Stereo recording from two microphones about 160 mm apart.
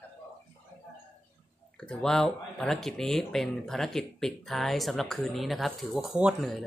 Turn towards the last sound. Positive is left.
turn(degrees=-5)  # may be behind; listen again after turning